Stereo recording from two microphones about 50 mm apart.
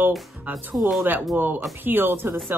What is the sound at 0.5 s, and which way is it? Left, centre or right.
Speech, centre.